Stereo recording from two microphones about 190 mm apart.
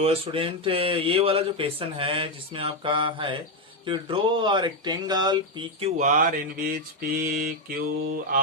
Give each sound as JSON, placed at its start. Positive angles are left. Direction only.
{"t": 0.0, "sound": "speech", "side_deg": -30}
{"t": 6.0, "sound": "mantra", "side_deg": -45}